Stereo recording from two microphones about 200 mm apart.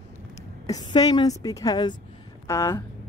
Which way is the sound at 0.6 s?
20° left (ahead or behind).